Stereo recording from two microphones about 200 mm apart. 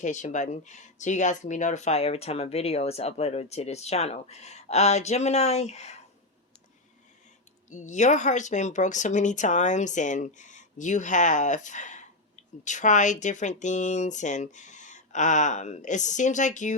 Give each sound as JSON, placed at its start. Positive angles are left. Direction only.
{"t": 0.0, "sound": "speech", "side_deg": 35}
{"t": 7.7, "sound": "speech", "side_deg": 35}